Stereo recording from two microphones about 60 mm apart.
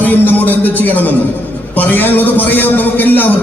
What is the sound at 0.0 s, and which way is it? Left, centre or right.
A man's voice, left.